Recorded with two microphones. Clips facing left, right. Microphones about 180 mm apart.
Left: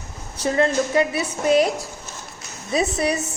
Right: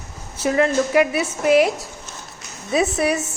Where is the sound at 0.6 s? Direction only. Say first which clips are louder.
Right 2 dB; 30° left (ahead or behind).